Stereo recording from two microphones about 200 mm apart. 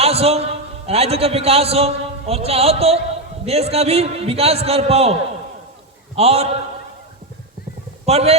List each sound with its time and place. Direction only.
0.0 s a man's voice: 30° right (ahead or behind)
6.1 s a man's voice: 30° right (ahead or behind)
8.0 s a man's voice: 30° right (ahead or behind)